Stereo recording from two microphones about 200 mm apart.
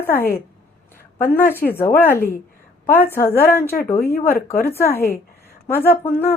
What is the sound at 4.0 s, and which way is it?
Speech, 50° left (ahead or behind).